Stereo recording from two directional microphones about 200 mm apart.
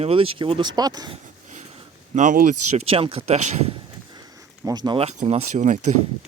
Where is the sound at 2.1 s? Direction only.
40° right (ahead or behind).